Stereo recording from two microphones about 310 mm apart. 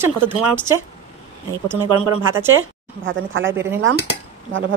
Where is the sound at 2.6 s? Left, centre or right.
Right.